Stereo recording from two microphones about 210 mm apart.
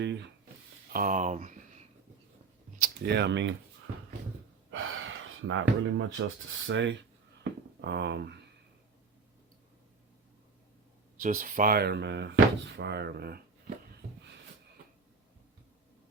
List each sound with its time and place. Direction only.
0.0 s speech: 55° right (ahead or behind)
0.9 s speech: 40° right (ahead or behind)
2.7 s speech: 45° right (ahead or behind)
4.7 s speech: 70° right (ahead or behind)
11.2 s speech: 40° right (ahead or behind)